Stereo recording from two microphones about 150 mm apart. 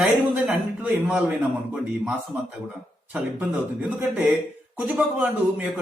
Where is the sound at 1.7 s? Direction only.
5° right (ahead or behind).